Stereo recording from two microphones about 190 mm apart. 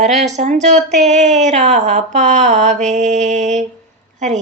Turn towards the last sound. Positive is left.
turn(degrees=-40)  # may be behind; listen again after turning